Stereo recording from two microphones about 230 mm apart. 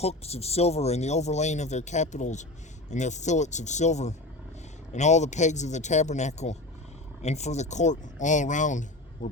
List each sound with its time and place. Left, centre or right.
0.0 s speech: left